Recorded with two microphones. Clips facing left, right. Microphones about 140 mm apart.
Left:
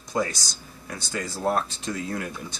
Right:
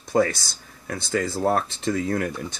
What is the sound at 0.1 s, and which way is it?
Speech, 55° right (ahead or behind).